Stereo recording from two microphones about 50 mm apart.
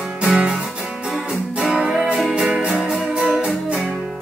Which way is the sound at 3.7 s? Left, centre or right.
Right.